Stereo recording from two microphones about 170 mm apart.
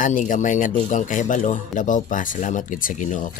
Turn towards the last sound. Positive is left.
turn(degrees=45)  # may be behind; listen again after turning